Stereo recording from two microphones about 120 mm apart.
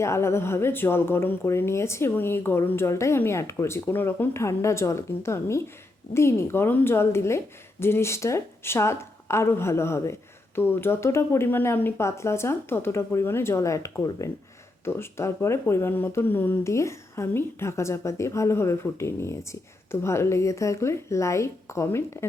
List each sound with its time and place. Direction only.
0.0 s a woman's voice: 20° left (ahead or behind)